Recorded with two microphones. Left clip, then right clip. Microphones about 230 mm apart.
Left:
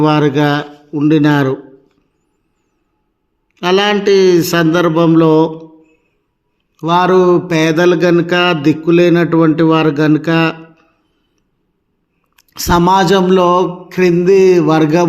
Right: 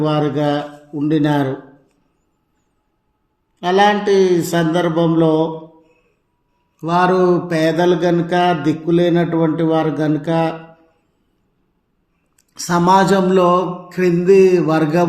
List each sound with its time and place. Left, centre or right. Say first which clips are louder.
0.0 s mantra: left 6 dB; left
3.6 s mantra: left 2 dB; left
6.7 s mantra: left 4 dB; left
12.4 s mantra: left 6 dB; left